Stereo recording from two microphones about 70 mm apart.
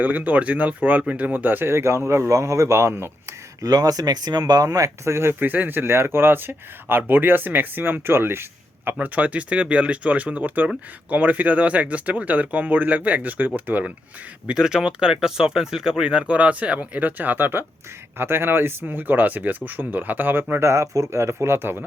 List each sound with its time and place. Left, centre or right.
0.0 s speech: right
3.6 s speech: right
5.0 s speech: right
9.0 s speech: right
14.4 s speech: centre; by 20.7 s right
20.7 s speech: right